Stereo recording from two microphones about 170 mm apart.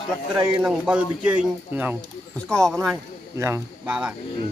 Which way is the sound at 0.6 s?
5° right (ahead or behind).